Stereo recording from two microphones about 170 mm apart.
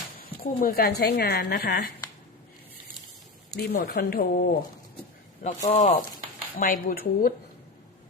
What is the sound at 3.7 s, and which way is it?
Speech, 70° left (ahead or behind).